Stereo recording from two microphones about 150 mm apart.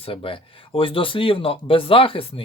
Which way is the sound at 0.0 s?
35° left (ahead or behind).